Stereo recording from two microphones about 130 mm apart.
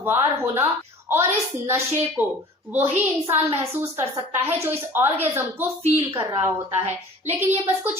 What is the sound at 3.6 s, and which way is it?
A woman's voice, 20° right (ahead or behind).